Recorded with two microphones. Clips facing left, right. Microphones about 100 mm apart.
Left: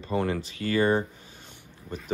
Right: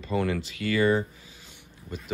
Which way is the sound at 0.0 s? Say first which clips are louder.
Even; 30° left (ahead or behind).